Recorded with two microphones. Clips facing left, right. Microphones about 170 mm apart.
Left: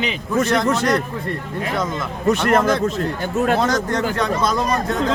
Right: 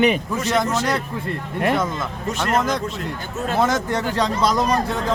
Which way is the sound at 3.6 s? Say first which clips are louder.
Even; 5° right (ahead or behind).